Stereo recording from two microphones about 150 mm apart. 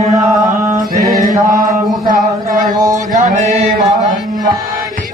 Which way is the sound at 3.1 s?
55° right (ahead or behind).